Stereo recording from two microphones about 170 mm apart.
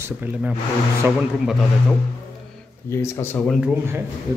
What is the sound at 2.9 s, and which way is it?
Speech, 15° left (ahead or behind).